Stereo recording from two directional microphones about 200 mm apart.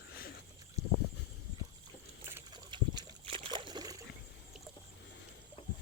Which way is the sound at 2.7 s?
25° right (ahead or behind).